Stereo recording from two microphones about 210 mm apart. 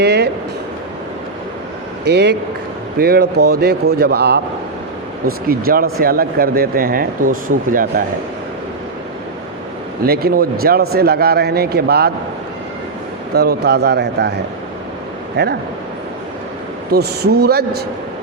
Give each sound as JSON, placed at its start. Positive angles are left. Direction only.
{"t": 0.0, "sound": "music", "side_deg": -50}
{"t": 2.0, "sound": "speech", "side_deg": -50}
{"t": 5.5, "sound": "speech", "side_deg": -45}
{"t": 10.0, "sound": "speech", "side_deg": -45}
{"t": 13.3, "sound": "speech", "side_deg": -50}
{"t": 15.4, "sound": "speech", "side_deg": -50}
{"t": 16.9, "sound": "speech", "side_deg": -50}